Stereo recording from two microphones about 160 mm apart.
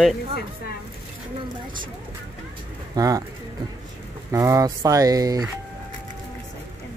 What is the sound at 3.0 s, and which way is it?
Speech, 20° right (ahead or behind).